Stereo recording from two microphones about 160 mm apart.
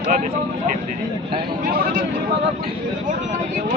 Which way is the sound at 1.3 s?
30° right (ahead or behind).